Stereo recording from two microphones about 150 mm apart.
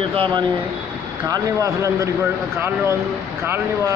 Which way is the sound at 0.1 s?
35° right (ahead or behind).